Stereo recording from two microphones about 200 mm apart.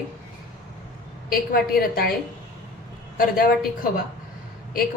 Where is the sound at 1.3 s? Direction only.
50° left (ahead or behind).